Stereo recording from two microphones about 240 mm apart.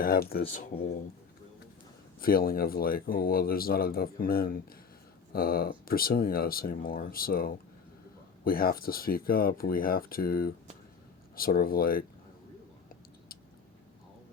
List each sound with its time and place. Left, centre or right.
0.0 s speech: left
2.2 s speech: left